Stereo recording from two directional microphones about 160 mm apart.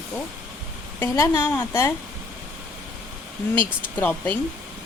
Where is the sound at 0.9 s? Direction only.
15° left (ahead or behind).